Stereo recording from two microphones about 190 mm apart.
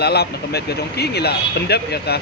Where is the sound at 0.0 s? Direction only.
60° left (ahead or behind).